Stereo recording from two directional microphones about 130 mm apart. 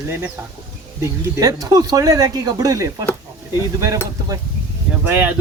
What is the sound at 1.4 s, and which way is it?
Speech, 30° right (ahead or behind).